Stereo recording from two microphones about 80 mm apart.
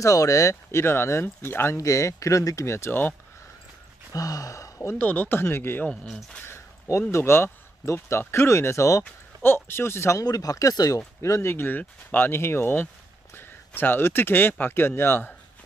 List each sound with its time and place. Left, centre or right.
0.0 s speech: left
4.1 s speech: left
4.9 s speech: left
9.0 s speech: left
10.2 s speech: left
11.1 s speech: left